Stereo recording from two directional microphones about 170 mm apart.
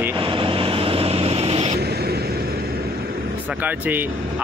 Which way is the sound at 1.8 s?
70° right (ahead or behind).